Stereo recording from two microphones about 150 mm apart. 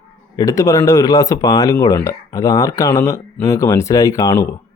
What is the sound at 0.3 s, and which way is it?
Speech, 20° left (ahead or behind).